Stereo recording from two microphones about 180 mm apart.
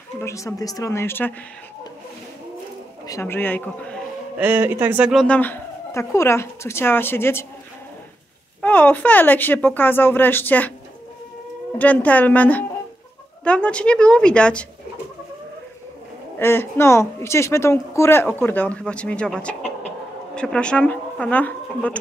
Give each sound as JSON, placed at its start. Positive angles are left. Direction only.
{"t": 0.2, "sound": "speech", "side_deg": 15}
{"t": 3.1, "sound": "a man's voice", "side_deg": 15}
{"t": 4.4, "sound": "speech", "side_deg": -10}
{"t": 5.2, "sound": "speech", "side_deg": 10}
{"t": 8.5, "sound": "speech", "side_deg": 10}
{"t": 11.8, "sound": "a woman's voice", "side_deg": 10}
{"t": 16.3, "sound": "speech", "side_deg": 15}